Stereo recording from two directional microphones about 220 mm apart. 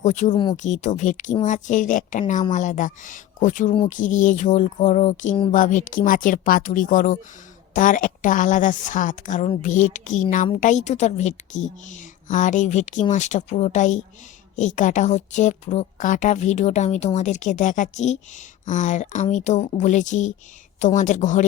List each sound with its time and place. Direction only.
0.0 s a woman's voice: 35° left (ahead or behind)